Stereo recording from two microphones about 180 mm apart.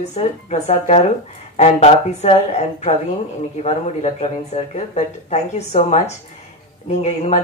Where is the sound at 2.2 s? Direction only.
35° left (ahead or behind).